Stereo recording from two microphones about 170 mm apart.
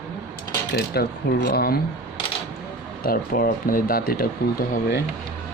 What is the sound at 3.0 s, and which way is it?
Speech, 60° left (ahead or behind).